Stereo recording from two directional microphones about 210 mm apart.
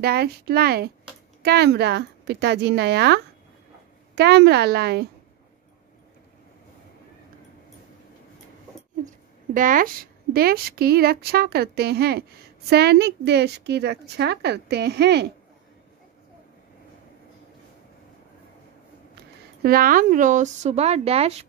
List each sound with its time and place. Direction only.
0.0 s a woman's voice: 50° right (ahead or behind)
9.5 s a woman's voice: 40° right (ahead or behind)
19.6 s speech: 45° right (ahead or behind)